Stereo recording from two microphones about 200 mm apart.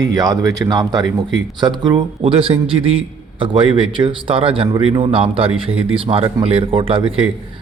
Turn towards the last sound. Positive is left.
turn(degrees=-25)  # may be behind; listen again after turning